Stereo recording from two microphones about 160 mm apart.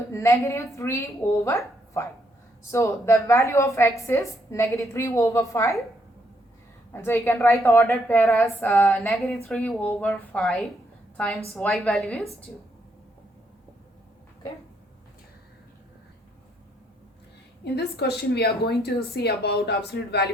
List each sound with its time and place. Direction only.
0.1 s a woman's voice: 15° left (ahead or behind)
6.9 s a woman's voice: 15° left (ahead or behind)
9.0 s a woman's voice: centre (ahead or behind)
17.6 s speech: 90° left